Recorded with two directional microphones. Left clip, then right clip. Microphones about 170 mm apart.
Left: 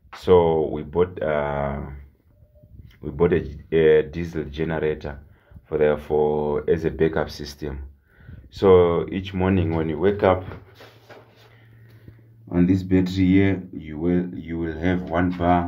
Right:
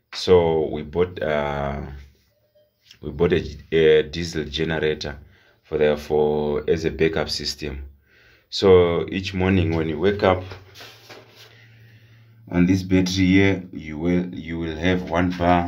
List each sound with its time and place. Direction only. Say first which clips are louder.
0.1 s speech: even; 10° right (ahead or behind)
3.0 s speech: even; 10° right (ahead or behind)
7.2 s speech: right 9 dB; 40° right (ahead or behind)
8.5 s speech: even; 10° right (ahead or behind)
12.6 s speech: right 1 dB; centre (ahead or behind)
13.8 s speech: even; 10° right (ahead or behind)
14.7 s speech: right 3 dB; 5° left (ahead or behind)